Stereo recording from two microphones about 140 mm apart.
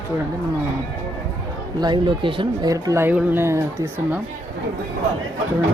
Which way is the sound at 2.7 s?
20° right (ahead or behind).